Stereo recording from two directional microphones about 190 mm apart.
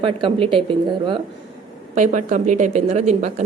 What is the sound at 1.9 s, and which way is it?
Speech, 40° right (ahead or behind).